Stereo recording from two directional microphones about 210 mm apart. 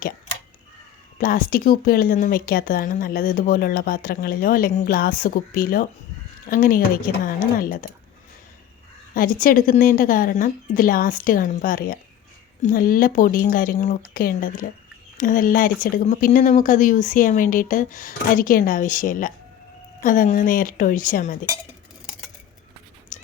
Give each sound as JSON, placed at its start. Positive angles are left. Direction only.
{"t": 1.2, "sound": "speech", "side_deg": 40}
{"t": 9.1, "sound": "speech", "side_deg": 40}
{"t": 23.1, "sound": "a sound", "side_deg": 35}